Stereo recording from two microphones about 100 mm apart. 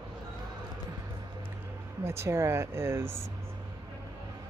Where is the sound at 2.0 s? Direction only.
25° right (ahead or behind).